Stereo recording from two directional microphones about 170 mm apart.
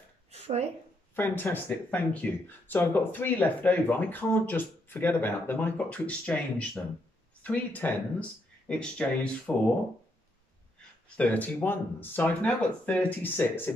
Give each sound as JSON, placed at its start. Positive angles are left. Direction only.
{"t": 0.3, "sound": "a sound", "side_deg": -40}
{"t": 1.1, "sound": "speech", "side_deg": 10}
{"t": 11.1, "sound": "speech", "side_deg": 10}